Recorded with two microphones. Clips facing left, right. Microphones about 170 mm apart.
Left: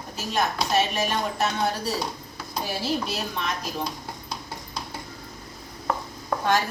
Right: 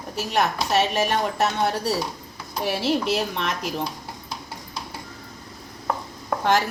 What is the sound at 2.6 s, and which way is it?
A woman's voice, 80° right.